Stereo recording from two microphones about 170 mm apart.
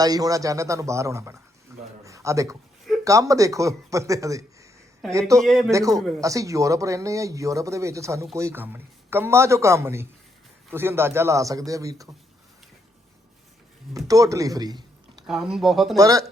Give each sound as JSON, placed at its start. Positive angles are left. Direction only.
{"t": 0.0, "sound": "a man's voice", "side_deg": -20}
{"t": 5.4, "sound": "speech", "side_deg": 0}
{"t": 5.7, "sound": "speech", "side_deg": -20}
{"t": 6.0, "sound": "speech", "side_deg": 0}
{"t": 6.2, "sound": "speech", "side_deg": -20}
{"t": 13.9, "sound": "speech", "side_deg": -20}
{"t": 15.3, "sound": "speech", "side_deg": -5}
{"t": 16.0, "sound": "speech", "side_deg": -20}